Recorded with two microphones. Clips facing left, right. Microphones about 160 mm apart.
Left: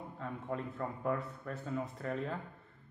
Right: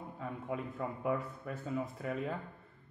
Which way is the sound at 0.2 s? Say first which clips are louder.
Even; 10° right (ahead or behind).